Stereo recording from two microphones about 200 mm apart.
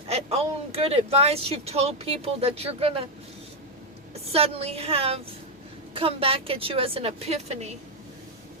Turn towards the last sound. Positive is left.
turn(degrees=-30)  # may be behind; listen again after turning